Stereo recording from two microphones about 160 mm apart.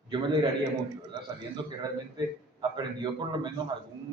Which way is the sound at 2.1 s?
25° right (ahead or behind).